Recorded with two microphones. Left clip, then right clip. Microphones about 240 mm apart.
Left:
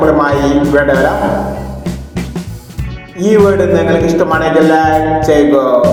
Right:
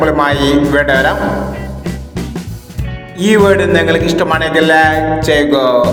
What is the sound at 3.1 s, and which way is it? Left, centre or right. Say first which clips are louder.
Speech: even; right.